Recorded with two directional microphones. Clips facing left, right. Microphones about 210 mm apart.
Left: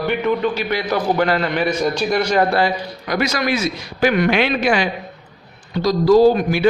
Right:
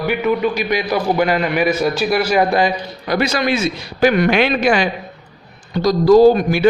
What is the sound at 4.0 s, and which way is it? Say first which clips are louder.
A man's voice: right 2 dB; 40° right (ahead or behind).